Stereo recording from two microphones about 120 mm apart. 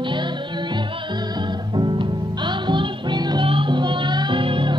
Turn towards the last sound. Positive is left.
turn(degrees=-45)  # may be behind; listen again after turning